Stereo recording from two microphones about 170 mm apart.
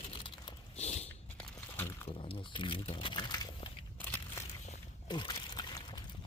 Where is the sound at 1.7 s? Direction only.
15° left (ahead or behind).